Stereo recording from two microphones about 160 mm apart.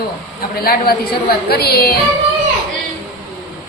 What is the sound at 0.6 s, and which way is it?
A woman's voice, 70° left (ahead or behind).